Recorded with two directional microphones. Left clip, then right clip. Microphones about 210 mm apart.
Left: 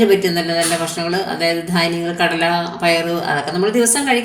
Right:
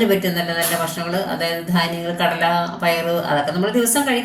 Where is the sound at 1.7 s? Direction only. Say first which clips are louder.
Left 3 dB; 45° left (ahead or behind).